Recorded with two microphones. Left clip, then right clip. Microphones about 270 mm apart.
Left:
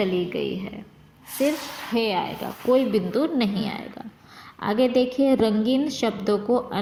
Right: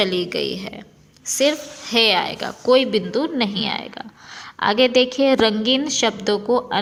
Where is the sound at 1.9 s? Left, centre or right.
Right.